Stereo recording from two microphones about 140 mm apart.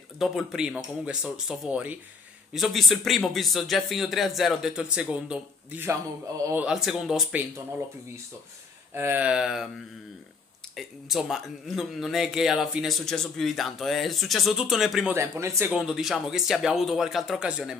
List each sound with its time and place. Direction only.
0.2 s speech: centre (ahead or behind)
8.9 s speech: 15° right (ahead or behind)
10.8 s speech: centre (ahead or behind)
15.1 s speech: 20° right (ahead or behind)
15.7 s speech: 5° right (ahead or behind)